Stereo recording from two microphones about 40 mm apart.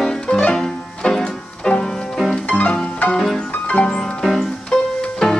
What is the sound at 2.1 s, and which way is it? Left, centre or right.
Music, centre.